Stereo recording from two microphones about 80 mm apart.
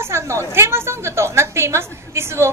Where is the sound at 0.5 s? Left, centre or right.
Right.